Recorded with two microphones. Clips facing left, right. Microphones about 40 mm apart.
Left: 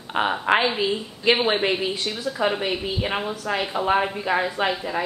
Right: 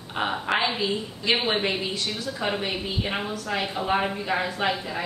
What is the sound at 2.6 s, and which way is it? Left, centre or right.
A woman's voice, centre.